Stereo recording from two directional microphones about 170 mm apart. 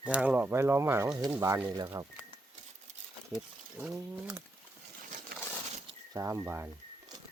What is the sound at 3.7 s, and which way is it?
Speech, 10° right (ahead or behind).